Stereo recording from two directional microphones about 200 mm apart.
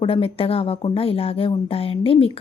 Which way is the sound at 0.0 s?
25° left (ahead or behind).